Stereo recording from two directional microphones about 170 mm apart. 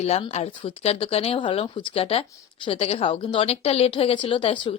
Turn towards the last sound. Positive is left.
turn(degrees=30)  # may be behind; listen again after turning